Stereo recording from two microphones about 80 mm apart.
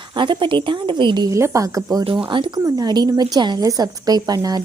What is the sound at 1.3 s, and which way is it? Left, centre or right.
Speech, right.